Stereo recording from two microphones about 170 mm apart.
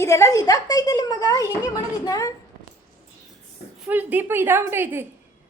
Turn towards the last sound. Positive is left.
turn(degrees=-15)  # may be behind; listen again after turning